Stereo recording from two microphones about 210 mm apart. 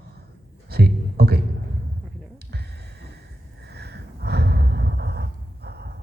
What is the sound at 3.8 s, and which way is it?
Gasp, 50° right (ahead or behind).